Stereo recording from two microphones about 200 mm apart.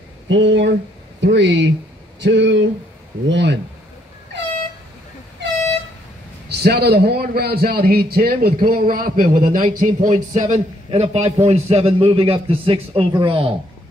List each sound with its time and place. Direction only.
0.3 s speech: 65° right (ahead or behind)
6.5 s a man's voice: 55° right (ahead or behind); by 13.5 s 25° right (ahead or behind)